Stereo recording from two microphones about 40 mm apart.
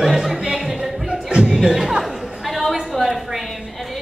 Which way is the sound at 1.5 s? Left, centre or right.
Centre.